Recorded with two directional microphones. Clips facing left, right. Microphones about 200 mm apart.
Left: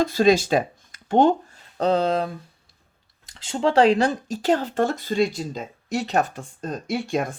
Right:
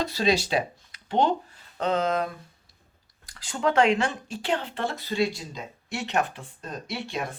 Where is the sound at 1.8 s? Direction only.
35° left (ahead or behind).